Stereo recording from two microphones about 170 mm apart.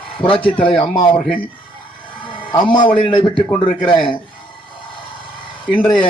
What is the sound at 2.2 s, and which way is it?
A man's voice, 30° left (ahead or behind).